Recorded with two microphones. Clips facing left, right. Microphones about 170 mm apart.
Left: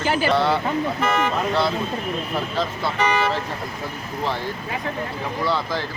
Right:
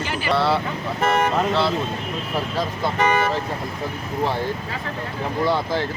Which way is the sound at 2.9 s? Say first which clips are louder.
Right 1 dB; 50° right (ahead or behind).